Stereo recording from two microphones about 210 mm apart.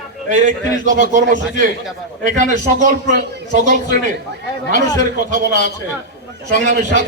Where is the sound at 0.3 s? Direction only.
40° right (ahead or behind).